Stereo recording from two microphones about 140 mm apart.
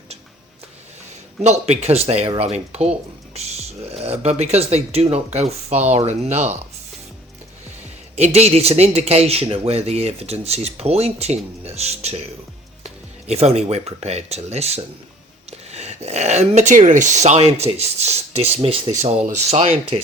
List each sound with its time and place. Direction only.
1.5 s speech: 50° right (ahead or behind)
7.8 s speech: 50° right (ahead or behind)